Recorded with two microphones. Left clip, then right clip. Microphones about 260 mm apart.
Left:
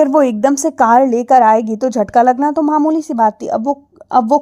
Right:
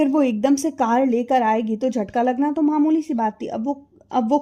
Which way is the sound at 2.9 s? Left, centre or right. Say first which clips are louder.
Left 4 dB; left.